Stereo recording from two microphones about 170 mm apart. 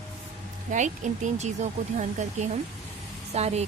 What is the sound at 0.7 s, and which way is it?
Speech, 45° right (ahead or behind).